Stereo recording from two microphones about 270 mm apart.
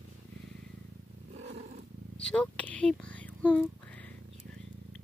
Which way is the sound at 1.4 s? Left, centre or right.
Right.